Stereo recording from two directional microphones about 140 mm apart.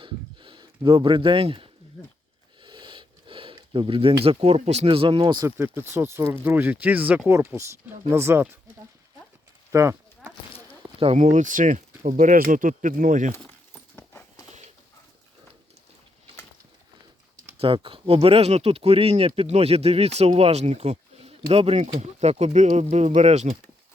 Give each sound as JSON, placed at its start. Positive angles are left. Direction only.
{"t": 0.0, "sound": "a sound", "side_deg": -35}
{"t": 2.6, "sound": "speech", "side_deg": -35}
{"t": 5.5, "sound": "speech", "side_deg": -15}
{"t": 9.7, "sound": "speech", "side_deg": -25}
{"t": 11.0, "sound": "speech", "side_deg": -50}
{"t": 13.9, "sound": "horse", "side_deg": 15}
{"t": 17.6, "sound": "speech", "side_deg": -40}